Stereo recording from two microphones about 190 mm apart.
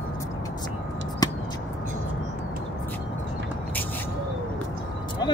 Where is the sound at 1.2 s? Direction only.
20° left (ahead or behind).